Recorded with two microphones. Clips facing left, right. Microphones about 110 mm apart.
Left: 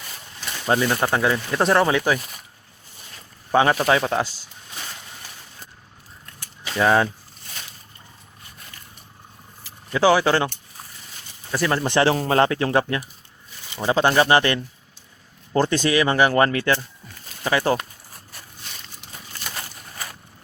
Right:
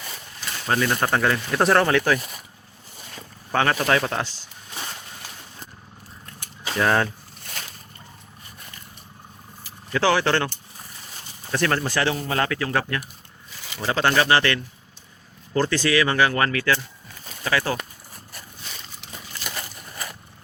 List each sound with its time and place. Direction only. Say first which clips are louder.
0.9 s speech: left 1 dB; 5° left (ahead or behind)
3.5 s speech: left 3 dB; 15° left (ahead or behind)
6.7 s speech: left 3 dB; 10° left (ahead or behind)
9.9 s speech: left 3 dB; 15° left (ahead or behind)
11.5 s speech: left 3 dB; 10° left (ahead or behind)
12.2 s speech: left 6 dB; 35° left (ahead or behind)
19.4 s a sound: even; 90° right